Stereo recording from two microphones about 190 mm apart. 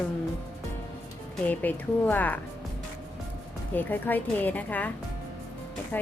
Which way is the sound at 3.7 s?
10° left (ahead or behind).